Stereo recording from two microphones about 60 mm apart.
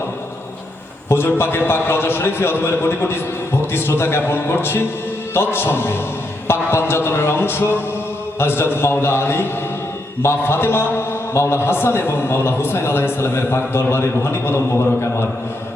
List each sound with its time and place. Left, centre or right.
1.1 s a man's voice: left